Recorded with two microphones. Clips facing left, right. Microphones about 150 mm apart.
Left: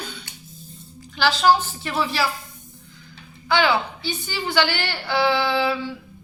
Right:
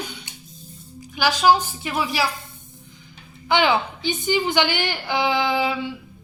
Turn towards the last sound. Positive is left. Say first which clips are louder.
# even
turn(degrees=-15)  # may be behind; listen again after turning